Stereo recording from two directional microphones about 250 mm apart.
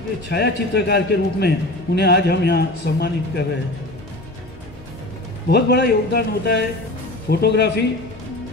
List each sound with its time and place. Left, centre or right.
0.3 s a man's voice: left
5.5 s a man's voice: left